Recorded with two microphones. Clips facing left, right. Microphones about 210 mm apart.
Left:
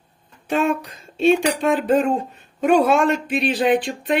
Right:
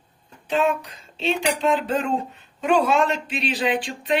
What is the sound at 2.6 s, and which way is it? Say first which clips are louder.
Speech: left 4 dB; 55° left (ahead or behind).